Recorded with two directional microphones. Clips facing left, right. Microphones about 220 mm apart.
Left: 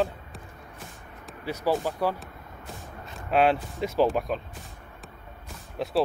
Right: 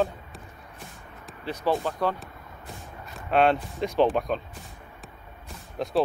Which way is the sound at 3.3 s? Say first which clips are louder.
Right 1 dB; 5° left (ahead or behind).